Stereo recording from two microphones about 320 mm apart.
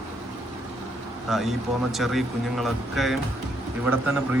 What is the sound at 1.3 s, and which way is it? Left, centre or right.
Speech, centre.